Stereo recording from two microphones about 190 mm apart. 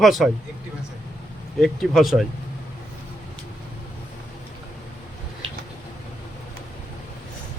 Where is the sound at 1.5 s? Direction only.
Centre (ahead or behind).